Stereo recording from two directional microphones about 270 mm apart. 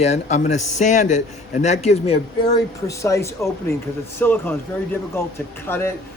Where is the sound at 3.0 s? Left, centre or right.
Centre.